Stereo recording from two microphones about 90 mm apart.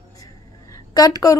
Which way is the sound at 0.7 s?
45° left (ahead or behind).